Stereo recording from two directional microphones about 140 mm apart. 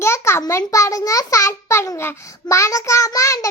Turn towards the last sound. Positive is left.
turn(degrees=25)  # may be behind; listen again after turning